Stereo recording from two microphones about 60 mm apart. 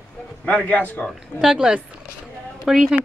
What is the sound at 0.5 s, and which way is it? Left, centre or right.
Speech, left.